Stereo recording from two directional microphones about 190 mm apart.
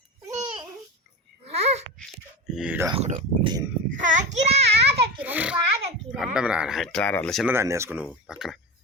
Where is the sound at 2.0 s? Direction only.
5° right (ahead or behind).